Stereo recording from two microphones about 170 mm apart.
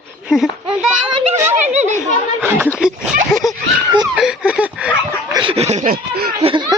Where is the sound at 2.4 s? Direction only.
10° right (ahead or behind).